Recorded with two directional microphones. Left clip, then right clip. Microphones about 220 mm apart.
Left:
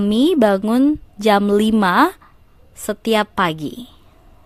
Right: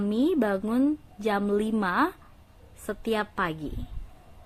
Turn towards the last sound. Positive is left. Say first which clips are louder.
# left 11 dB
turn(degrees=45)  # may be behind; listen again after turning